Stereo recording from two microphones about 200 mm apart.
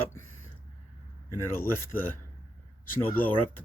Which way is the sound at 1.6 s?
10° left (ahead or behind).